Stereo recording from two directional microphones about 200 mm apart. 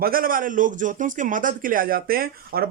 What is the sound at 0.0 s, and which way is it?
A man's voice, 45° right (ahead or behind).